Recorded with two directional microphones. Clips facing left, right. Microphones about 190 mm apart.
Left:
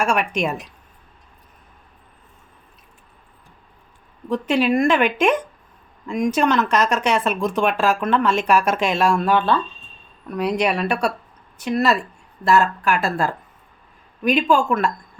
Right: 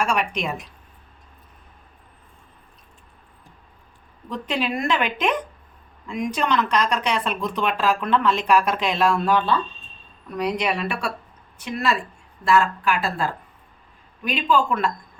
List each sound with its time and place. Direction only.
0.0 s speech: 50° left (ahead or behind)
4.3 s speech: 50° left (ahead or behind)
14.3 s speech: 45° left (ahead or behind)